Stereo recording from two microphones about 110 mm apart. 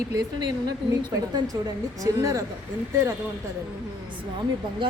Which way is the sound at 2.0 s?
30° right (ahead or behind).